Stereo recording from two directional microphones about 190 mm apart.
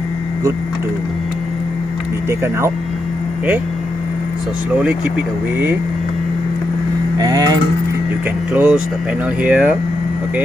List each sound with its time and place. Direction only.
7.2 s speech: 20° right (ahead or behind)
8.5 s speech: 10° right (ahead or behind)